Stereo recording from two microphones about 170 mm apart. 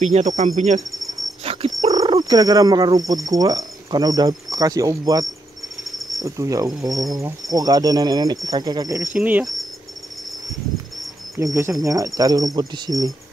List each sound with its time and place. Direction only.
0.0 s cricket: 45° right (ahead or behind)
1.4 s dog: 35° right (ahead or behind)
1.9 s speech: 20° right (ahead or behind)
5.9 s cricket: centre (ahead or behind)
6.2 s speech: 20° right (ahead or behind)
9.1 s cricket: 10° right (ahead or behind)
11.3 s speech: 20° right (ahead or behind)